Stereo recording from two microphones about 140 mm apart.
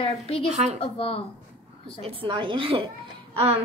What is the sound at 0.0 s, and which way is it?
A woman's voice, 45° left (ahead or behind).